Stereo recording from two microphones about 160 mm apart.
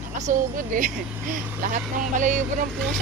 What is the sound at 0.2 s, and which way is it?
Speech, 55° right (ahead or behind).